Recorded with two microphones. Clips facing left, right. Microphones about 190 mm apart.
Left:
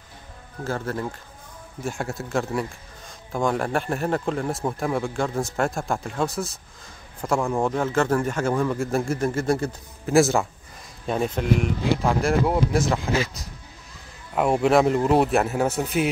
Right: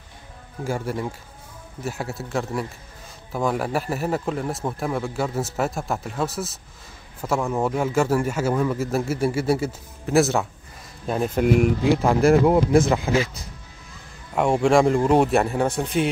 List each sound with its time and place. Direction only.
0.7 s a man's voice: 10° right (ahead or behind)
14.3 s speech: 5° left (ahead or behind)